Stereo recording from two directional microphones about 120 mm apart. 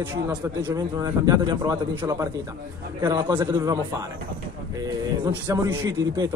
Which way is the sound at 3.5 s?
35° right (ahead or behind).